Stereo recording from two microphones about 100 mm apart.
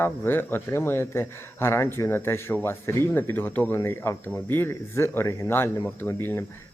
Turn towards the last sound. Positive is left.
turn(degrees=25)  # may be behind; listen again after turning